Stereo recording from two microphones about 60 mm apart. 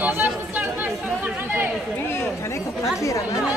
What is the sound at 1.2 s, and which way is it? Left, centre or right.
Speech, right.